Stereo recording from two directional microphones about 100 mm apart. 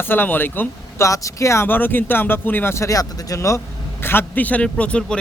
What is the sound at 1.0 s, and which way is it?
Speech, 30° left (ahead or behind).